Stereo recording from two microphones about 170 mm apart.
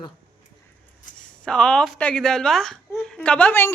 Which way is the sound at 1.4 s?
5° left (ahead or behind).